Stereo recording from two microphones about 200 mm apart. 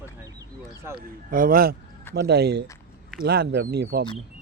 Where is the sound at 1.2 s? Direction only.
45° right (ahead or behind).